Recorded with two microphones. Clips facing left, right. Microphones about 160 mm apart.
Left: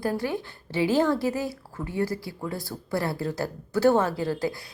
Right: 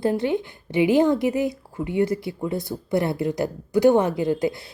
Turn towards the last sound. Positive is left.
turn(degrees=-20)  # may be behind; listen again after turning